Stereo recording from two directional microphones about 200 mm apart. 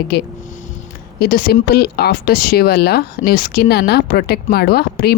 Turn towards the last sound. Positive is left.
turn(degrees=50)  # may be behind; listen again after turning